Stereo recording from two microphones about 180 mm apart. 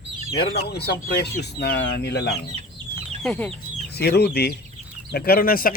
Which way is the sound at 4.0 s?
65° left (ahead or behind).